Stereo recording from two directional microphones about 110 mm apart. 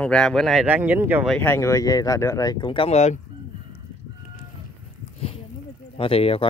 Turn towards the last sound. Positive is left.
turn(degrees=60)  # may be behind; listen again after turning